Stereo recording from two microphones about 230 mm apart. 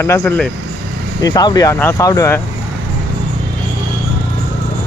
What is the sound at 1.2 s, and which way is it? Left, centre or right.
Speech, centre.